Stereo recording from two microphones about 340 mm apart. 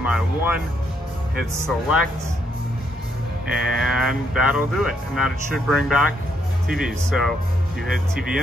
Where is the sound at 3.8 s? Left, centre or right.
Centre.